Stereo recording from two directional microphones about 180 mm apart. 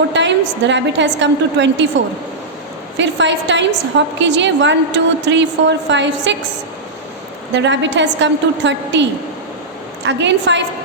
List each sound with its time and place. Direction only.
0.1 s a woman's voice: 80° right
3.0 s a woman's voice: 85° right
7.5 s a woman's voice: 80° right
10.1 s a woman's voice: 80° right